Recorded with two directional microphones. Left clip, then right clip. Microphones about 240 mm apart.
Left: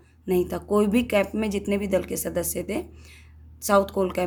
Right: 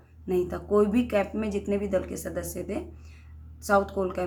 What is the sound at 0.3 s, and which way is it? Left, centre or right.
Speech, left.